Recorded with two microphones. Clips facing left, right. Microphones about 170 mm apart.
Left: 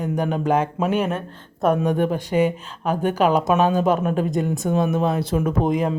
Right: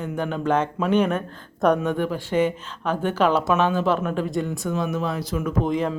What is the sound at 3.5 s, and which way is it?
Speech, 40° left (ahead or behind).